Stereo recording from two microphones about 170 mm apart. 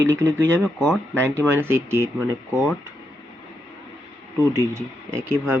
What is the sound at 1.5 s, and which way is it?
Speech, 15° right (ahead or behind).